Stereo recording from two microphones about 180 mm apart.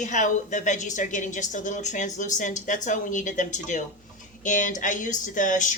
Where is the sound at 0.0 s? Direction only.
45° left (ahead or behind).